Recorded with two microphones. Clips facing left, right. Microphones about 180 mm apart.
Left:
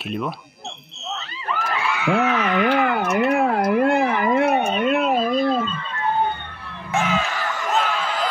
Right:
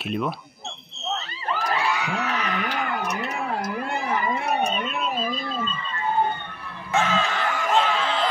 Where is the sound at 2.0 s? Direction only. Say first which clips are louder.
Left 8 dB; 60° left (ahead or behind).